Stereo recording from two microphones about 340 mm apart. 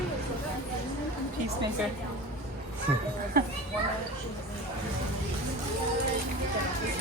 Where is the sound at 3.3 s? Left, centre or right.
Right.